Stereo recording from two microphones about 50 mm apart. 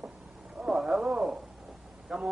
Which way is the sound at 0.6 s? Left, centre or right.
Centre.